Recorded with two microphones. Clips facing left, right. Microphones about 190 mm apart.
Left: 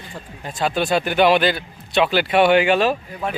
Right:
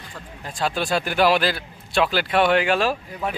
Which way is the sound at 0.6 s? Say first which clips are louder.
Left 4 dB; centre (ahead or behind).